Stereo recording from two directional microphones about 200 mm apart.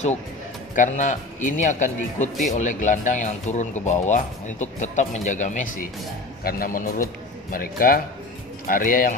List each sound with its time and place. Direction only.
0.7 s a man's voice: 40° left (ahead or behind)